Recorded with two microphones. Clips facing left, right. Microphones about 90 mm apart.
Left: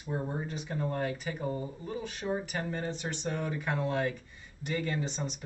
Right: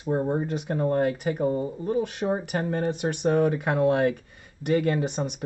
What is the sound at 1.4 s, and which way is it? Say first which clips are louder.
Speech: right 11 dB; 45° right (ahead or behind).